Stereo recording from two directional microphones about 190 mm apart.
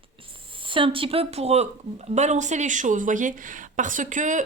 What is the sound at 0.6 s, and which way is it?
Speech, 25° right (ahead or behind).